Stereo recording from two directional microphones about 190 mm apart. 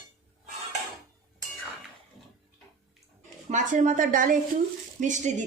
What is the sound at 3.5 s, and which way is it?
A woman's voice, 40° right (ahead or behind).